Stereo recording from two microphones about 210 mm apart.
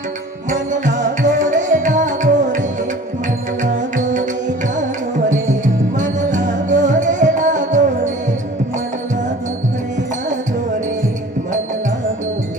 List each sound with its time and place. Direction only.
0.5 s music: 35° right (ahead or behind)
3.6 s music: 35° right (ahead or behind)
5.3 s music: 35° right (ahead or behind)